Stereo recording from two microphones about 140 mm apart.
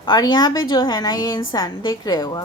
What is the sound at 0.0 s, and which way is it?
A woman's voice, 30° left (ahead or behind).